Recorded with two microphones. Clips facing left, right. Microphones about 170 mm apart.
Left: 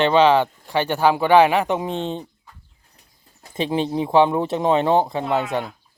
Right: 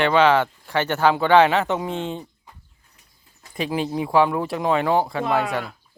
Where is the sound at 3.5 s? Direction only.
25° left (ahead or behind).